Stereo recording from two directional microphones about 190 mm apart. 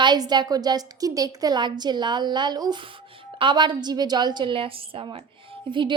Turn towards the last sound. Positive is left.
turn(degrees=-25)  # may be behind; listen again after turning